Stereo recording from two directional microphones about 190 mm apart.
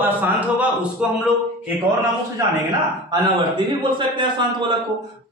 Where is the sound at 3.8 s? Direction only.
25° right (ahead or behind).